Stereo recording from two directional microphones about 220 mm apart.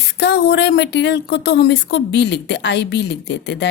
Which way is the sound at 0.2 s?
50° left (ahead or behind).